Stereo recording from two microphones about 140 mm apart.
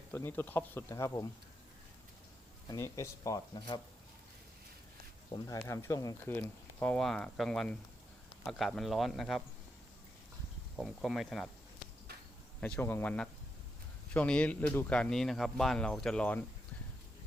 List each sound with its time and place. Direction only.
0.1 s speech: 15° left (ahead or behind)
2.6 s speech: 25° left (ahead or behind)
5.5 s speech: 20° left (ahead or behind); by 9.4 s centre (ahead or behind)
10.8 s speech: centre (ahead or behind)
12.5 s speech: 5° left (ahead or behind)